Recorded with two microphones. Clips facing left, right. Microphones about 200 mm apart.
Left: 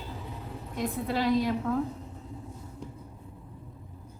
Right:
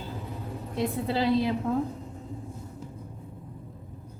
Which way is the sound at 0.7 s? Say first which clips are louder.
Right 2 dB; 30° right (ahead or behind).